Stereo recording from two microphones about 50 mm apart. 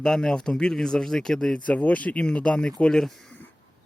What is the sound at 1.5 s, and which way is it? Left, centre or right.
Speech, left.